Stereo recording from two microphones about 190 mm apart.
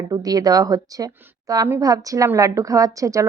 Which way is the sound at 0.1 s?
20° right (ahead or behind).